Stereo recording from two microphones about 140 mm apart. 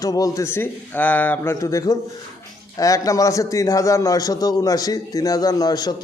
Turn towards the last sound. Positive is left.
turn(degrees=30)  # may be behind; listen again after turning